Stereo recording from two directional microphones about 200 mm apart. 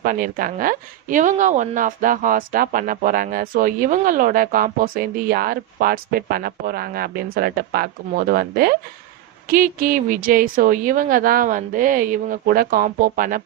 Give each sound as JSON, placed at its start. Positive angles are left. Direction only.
{"t": 0.0, "sound": "a woman's voice", "side_deg": -45}